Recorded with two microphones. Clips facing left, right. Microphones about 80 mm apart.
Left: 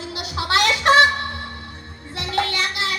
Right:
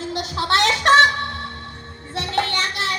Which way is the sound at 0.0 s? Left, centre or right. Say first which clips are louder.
Right 3 dB; right.